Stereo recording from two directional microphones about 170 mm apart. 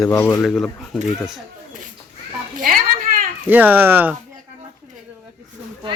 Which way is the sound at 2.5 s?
55° right (ahead or behind).